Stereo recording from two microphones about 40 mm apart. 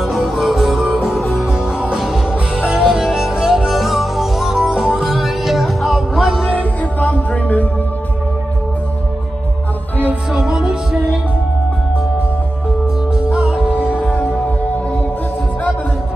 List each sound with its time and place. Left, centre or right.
0.0 s music: centre
0.4 s music: centre
1.5 s music: centre
6.5 s music: left
10.3 s music: centre
13.3 s music: right